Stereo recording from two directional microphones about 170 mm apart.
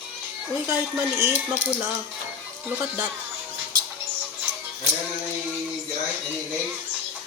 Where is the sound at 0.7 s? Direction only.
15° right (ahead or behind).